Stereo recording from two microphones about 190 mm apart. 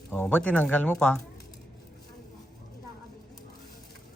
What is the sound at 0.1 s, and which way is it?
Speech, 10° left (ahead or behind).